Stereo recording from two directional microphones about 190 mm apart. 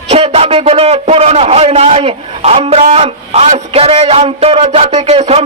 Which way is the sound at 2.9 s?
30° right (ahead or behind).